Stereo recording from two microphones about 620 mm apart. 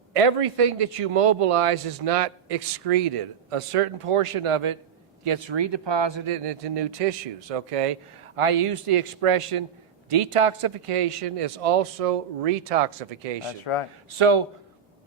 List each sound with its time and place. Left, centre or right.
0.1 s speech: right
13.4 s speech: left
14.1 s a man's voice: right